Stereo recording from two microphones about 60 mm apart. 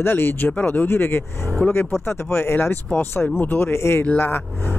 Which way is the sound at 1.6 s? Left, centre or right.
Centre.